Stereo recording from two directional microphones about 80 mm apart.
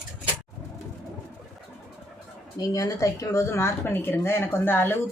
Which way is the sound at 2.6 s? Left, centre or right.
Left.